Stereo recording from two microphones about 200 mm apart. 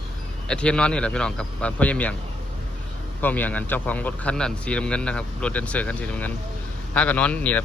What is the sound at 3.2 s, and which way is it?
Speech, 10° left (ahead or behind).